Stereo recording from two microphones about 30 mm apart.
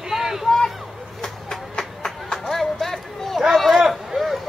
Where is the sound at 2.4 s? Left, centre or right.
Centre.